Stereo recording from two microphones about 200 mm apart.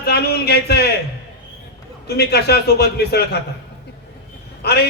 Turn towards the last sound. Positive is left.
turn(degrees=55)  # may be behind; listen again after turning